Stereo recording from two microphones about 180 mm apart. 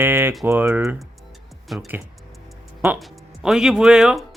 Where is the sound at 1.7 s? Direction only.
Centre (ahead or behind).